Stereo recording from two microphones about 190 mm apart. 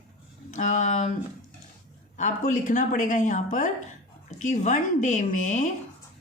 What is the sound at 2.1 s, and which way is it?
A woman's voice, 40° left (ahead or behind).